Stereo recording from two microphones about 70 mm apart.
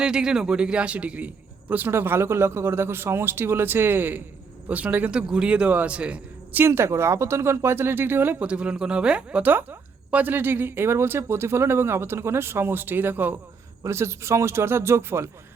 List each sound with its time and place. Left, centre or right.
0.0 s a man's voice: centre
6.6 s a man's voice: right
8.4 s a woman's voice: centre
13.8 s a man's voice: right